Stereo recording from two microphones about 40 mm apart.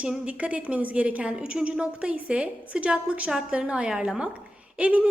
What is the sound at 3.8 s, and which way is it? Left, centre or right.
Speech, centre.